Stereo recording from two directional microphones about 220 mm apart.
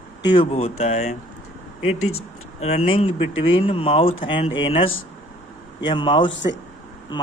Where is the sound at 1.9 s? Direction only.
75° left (ahead or behind).